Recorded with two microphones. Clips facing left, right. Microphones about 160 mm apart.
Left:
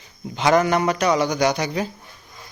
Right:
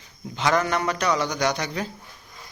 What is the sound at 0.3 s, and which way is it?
A man's voice, 15° left (ahead or behind).